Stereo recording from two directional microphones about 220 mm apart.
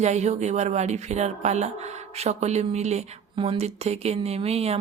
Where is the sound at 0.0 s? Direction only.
30° right (ahead or behind).